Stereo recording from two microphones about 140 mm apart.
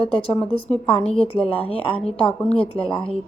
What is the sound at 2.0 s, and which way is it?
Speech, 5° left (ahead or behind).